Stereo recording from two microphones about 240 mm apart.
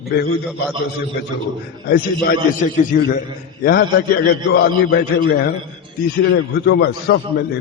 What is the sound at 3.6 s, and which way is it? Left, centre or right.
A man's voice, left.